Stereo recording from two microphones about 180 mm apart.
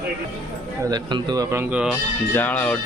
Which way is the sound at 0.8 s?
25° right (ahead or behind).